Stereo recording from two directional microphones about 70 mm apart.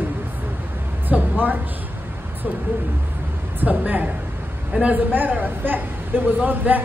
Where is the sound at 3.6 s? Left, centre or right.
Right.